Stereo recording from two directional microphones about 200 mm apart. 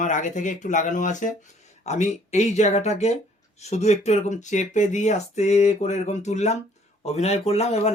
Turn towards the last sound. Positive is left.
turn(degrees=30)  # may be behind; listen again after turning